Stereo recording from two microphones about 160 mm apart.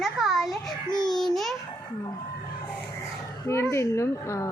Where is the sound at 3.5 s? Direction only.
15° left (ahead or behind).